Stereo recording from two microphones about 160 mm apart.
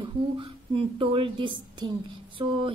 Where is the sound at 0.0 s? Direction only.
30° right (ahead or behind).